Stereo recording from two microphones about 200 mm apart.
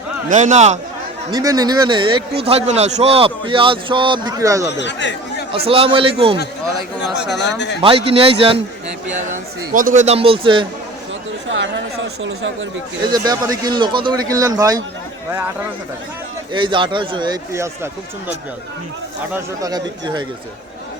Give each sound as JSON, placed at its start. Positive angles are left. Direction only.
{"t": 0.3, "sound": "a man's voice", "side_deg": -35}
{"t": 1.3, "sound": "speech", "side_deg": -20}
{"t": 4.8, "sound": "speech", "side_deg": 65}
{"t": 5.5, "sound": "speech", "side_deg": -30}
{"t": 7.3, "sound": "speech", "side_deg": 60}
{"t": 7.8, "sound": "speech", "side_deg": -25}
{"t": 9.1, "sound": "a man's voice", "side_deg": -40}
{"t": 11.4, "sound": "chatter", "side_deg": -70}
{"t": 13.1, "sound": "speech", "side_deg": -20}
{"t": 16.5, "sound": "speech", "side_deg": -25}
{"t": 19.3, "sound": "speech", "side_deg": -20}